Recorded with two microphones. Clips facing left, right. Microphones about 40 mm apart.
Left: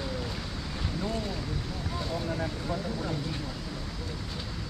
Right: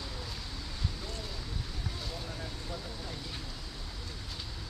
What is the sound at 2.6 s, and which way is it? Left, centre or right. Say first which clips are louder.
Vehicle: left 9 dB; left.